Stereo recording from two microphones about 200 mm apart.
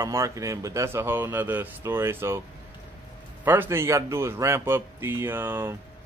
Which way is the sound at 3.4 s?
10° right (ahead or behind).